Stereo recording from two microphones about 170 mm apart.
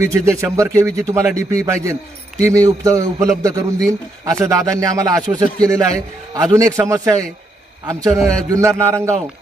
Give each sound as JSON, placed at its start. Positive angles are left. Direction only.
{"t": 0.0, "sound": "a man's voice", "side_deg": -15}